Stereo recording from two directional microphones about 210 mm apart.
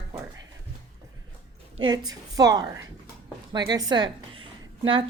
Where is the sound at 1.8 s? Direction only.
20° right (ahead or behind).